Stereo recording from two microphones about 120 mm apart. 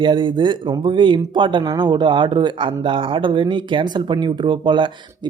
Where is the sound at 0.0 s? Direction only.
45° right (ahead or behind).